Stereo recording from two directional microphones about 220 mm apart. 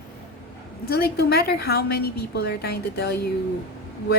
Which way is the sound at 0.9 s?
45° left (ahead or behind).